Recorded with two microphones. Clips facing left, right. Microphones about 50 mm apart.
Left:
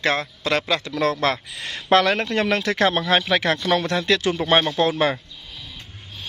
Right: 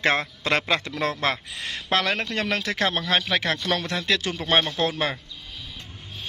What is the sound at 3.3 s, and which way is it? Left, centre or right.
Speech, centre.